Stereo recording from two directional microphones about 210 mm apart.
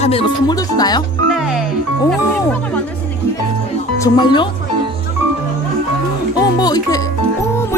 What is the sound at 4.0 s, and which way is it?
Speech, 20° left (ahead or behind).